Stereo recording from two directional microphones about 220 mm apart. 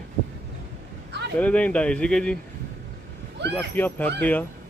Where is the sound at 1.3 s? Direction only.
5° left (ahead or behind).